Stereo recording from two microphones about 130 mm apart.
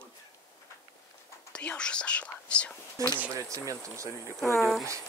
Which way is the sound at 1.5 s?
5° left (ahead or behind).